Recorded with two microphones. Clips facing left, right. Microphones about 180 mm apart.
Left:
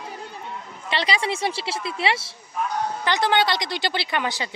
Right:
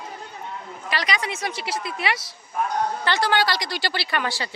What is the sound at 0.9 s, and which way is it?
A woman's voice, 25° left (ahead or behind).